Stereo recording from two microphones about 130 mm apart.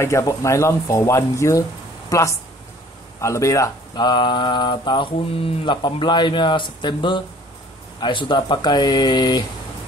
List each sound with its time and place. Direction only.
0.0 s speech: 25° left (ahead or behind)